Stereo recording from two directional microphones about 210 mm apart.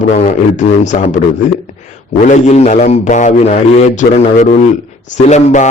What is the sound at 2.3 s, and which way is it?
A man's voice, 35° left (ahead or behind).